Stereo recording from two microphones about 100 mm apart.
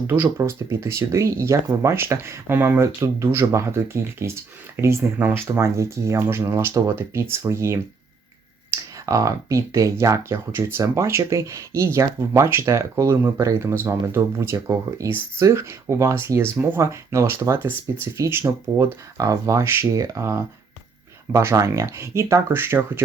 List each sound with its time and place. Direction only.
0.1 s speech: 20° right (ahead or behind)